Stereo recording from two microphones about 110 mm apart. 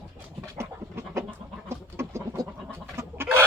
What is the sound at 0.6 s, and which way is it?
Pant, 25° right (ahead or behind).